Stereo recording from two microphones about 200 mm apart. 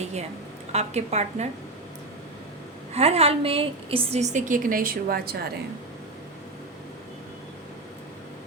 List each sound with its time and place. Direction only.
0.0 s a sound: 35° right (ahead or behind)
0.7 s a woman's voice: 35° right (ahead or behind)
2.9 s a woman's voice: 30° right (ahead or behind); by 5.5 s 50° right (ahead or behind)